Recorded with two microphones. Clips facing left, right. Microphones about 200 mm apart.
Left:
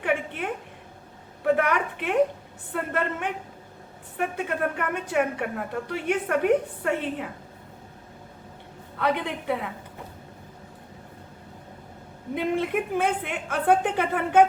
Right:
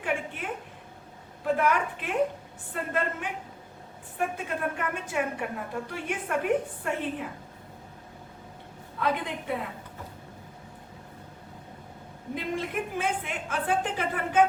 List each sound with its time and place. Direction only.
0.0 s a sound: 65° left (ahead or behind)
2.7 s a woman's voice: 60° left (ahead or behind)
4.4 s a woman's voice: 60° left (ahead or behind)
9.0 s a woman's voice: 65° left (ahead or behind)
12.3 s a woman's voice: 60° left (ahead or behind)